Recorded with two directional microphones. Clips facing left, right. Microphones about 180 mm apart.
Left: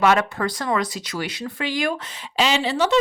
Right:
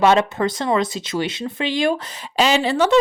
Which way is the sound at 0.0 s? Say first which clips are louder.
Right 3 dB; 25° right (ahead or behind).